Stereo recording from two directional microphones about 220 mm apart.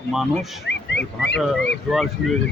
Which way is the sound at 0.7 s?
50° left (ahead or behind).